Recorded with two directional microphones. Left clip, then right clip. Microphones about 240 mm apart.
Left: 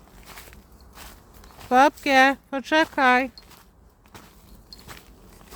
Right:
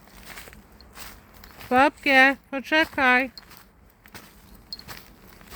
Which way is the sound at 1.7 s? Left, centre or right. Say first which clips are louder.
Left 1 dB; centre.